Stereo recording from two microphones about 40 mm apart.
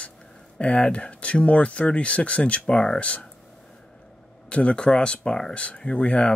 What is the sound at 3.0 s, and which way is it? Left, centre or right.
Speech, left.